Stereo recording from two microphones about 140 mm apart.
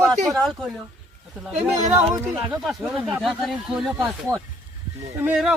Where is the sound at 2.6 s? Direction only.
Centre (ahead or behind).